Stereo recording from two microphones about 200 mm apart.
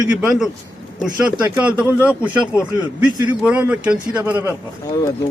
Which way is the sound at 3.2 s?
5° right (ahead or behind).